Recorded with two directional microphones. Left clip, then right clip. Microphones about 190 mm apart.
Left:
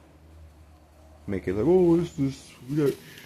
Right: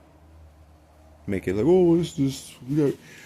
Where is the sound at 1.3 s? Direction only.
35° right (ahead or behind).